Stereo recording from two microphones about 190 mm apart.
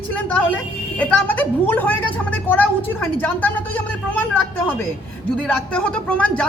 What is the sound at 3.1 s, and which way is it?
A woman's voice, 10° left (ahead or behind).